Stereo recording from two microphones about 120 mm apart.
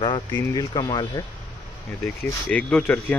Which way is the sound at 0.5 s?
35° left (ahead or behind).